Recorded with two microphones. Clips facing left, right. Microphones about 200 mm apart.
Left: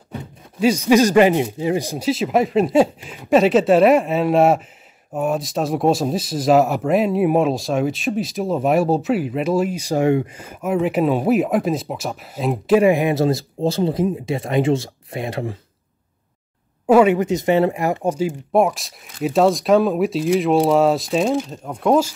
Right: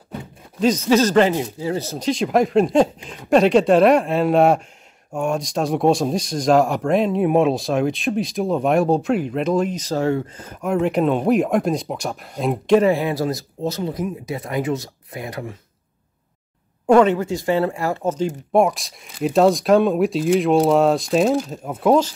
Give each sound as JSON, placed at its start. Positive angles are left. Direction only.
{"t": 0.6, "sound": "speech", "side_deg": 10}
{"t": 12.9, "sound": "speech", "side_deg": 20}
{"t": 16.8, "sound": "speech", "side_deg": 5}